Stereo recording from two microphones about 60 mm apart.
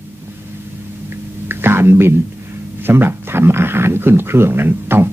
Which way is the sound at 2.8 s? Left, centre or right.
Right.